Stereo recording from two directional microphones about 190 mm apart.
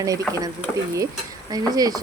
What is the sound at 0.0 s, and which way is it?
Stir, 20° right (ahead or behind).